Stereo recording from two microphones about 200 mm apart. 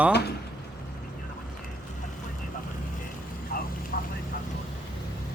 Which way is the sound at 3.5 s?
45° left (ahead or behind).